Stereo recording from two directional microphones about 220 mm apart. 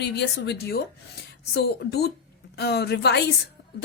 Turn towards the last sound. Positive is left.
turn(degrees=50)  # may be behind; listen again after turning